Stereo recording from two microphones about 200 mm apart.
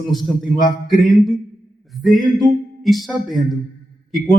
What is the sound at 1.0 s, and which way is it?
A man's voice, centre (ahead or behind).